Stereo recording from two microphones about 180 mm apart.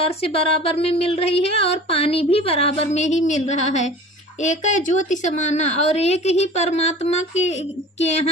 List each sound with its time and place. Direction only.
0.0 s speech: 35° left (ahead or behind)